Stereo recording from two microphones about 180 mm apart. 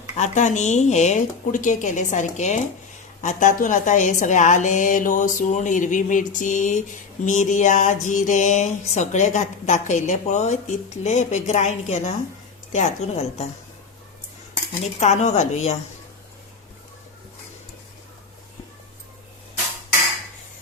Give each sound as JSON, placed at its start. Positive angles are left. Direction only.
{"t": 0.2, "sound": "a woman's voice", "side_deg": 40}
{"t": 14.9, "sound": "speech", "side_deg": 40}